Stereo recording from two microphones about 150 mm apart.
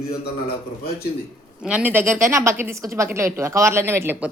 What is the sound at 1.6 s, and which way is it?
A woman's voice, 10° right (ahead or behind).